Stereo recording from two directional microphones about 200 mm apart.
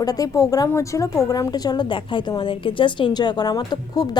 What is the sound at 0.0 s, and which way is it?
A woman's voice, 20° left (ahead or behind).